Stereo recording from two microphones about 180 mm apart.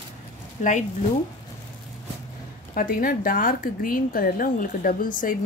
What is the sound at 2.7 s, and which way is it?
Speech, 50° left (ahead or behind).